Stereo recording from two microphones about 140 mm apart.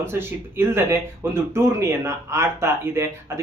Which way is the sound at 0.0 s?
15° right (ahead or behind).